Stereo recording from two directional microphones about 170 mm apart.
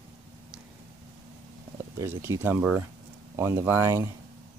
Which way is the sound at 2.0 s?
15° right (ahead or behind).